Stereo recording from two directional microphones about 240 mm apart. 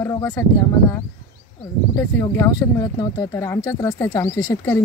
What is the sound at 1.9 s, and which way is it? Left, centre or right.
Speech, centre.